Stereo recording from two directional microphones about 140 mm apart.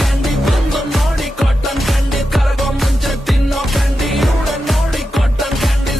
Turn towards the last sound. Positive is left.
turn(degrees=0)  # may be behind; listen again after turning